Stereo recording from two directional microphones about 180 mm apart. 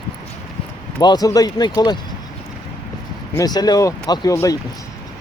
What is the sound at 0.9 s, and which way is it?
Speech, 20° left (ahead or behind).